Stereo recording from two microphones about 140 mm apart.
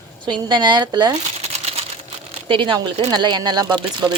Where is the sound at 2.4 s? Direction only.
35° right (ahead or behind).